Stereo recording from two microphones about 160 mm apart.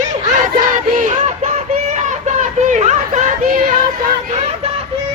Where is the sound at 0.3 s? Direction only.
50° right (ahead or behind).